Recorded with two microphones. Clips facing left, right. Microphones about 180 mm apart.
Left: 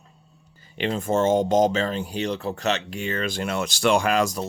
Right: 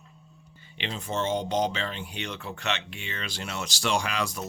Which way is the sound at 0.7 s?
45° left (ahead or behind).